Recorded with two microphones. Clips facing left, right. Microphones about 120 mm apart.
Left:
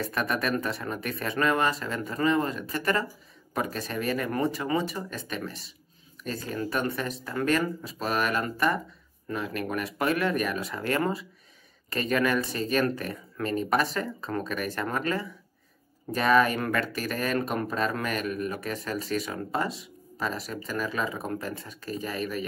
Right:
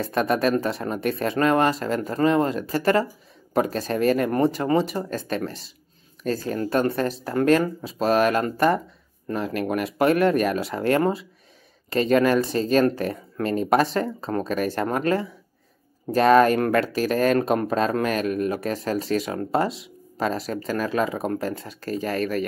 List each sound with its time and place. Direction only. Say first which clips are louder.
0.0 s speech: right 7 dB; 30° right (ahead or behind)
4.0 s speech: right 9 dB; 60° right (ahead or behind)
4.3 s speech: right 6 dB; 35° right (ahead or behind)
9.3 s speech: right 6 dB; 45° right (ahead or behind)
10.2 s speech: right 7 dB; 30° right (ahead or behind)
16.3 s speech: right 4 dB; 55° right (ahead or behind)
16.8 s speech: right 8 dB; 90° right
17.1 s speech: right 9 dB; 35° right (ahead or behind)
19.7 s a sound: right 2 dB; 85° right
20.7 s speech: right 6 dB; 50° right (ahead or behind); by 21.3 s 65° right (ahead or behind)
21.3 s speech: right 6 dB; 35° right (ahead or behind)
21.6 s speech: right 7 dB; 90° right